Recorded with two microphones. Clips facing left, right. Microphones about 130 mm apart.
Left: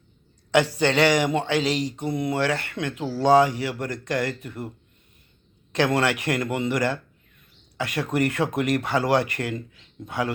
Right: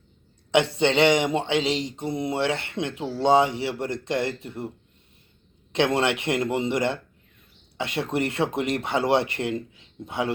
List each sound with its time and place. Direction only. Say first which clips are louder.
0.5 s speech: even; 25° right (ahead or behind)
5.7 s speech: even; 25° right (ahead or behind)